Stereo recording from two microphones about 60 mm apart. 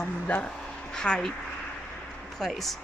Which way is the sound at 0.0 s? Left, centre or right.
Left.